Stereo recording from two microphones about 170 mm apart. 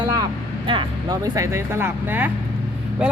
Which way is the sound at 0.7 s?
25° right (ahead or behind).